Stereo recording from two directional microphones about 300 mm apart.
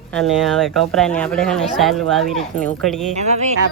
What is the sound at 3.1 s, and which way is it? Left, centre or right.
Speech, right.